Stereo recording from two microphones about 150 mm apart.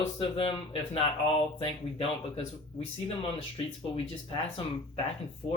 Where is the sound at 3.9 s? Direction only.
40° left (ahead or behind).